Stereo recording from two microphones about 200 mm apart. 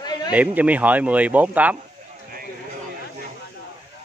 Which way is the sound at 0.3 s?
10° right (ahead or behind).